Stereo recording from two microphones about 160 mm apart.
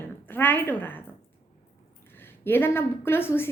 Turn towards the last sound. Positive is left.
turn(degrees=15)  # may be behind; listen again after turning